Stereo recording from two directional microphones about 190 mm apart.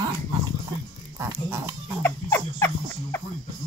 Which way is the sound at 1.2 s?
15° right (ahead or behind).